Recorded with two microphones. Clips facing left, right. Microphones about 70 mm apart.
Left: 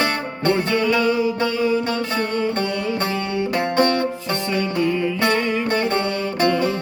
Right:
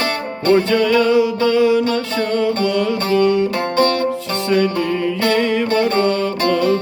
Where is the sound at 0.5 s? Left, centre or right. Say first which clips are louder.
Right 7 dB; right.